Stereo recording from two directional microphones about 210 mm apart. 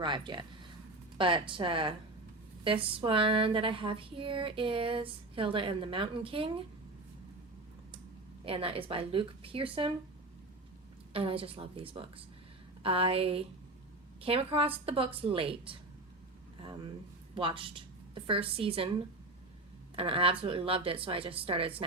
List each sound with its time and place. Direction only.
0.0 s speech: 20° right (ahead or behind)
8.4 s speech: 25° right (ahead or behind)
11.1 s speech: 25° right (ahead or behind)
16.6 s a sound: 20° right (ahead or behind)
17.3 s a woman's voice: 25° right (ahead or behind)